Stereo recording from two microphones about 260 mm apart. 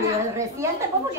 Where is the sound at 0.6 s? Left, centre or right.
Centre.